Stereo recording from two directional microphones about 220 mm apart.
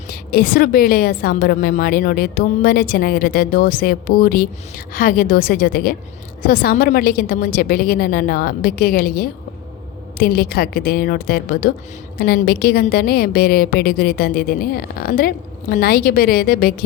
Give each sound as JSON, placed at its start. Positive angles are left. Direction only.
{"t": 0.1, "sound": "a woman's voice", "side_deg": 45}